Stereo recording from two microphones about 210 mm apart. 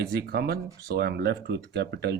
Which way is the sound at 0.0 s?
50° right (ahead or behind).